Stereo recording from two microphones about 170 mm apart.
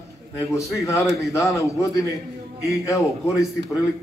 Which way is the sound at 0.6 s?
15° left (ahead or behind).